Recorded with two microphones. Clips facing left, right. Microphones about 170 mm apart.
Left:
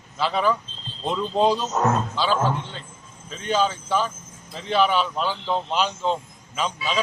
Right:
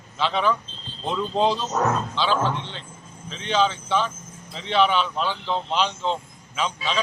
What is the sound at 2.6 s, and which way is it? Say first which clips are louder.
Speech: left 1 dB; 45° left (ahead or behind).